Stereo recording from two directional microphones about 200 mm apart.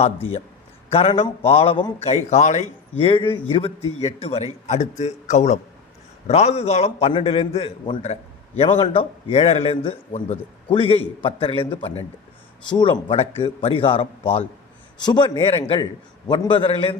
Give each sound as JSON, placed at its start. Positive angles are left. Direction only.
{"t": 0.9, "sound": "a man's voice", "side_deg": 30}